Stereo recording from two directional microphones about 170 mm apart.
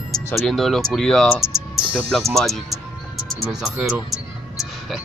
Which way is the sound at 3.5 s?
5° right (ahead or behind).